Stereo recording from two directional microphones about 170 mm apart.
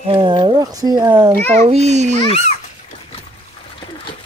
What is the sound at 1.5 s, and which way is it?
Speech, 40° right (ahead or behind).